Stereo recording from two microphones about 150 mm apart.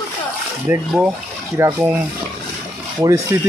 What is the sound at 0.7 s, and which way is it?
Speech, 5° right (ahead or behind).